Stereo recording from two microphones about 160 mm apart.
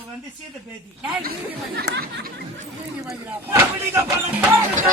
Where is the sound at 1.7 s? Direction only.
85° right.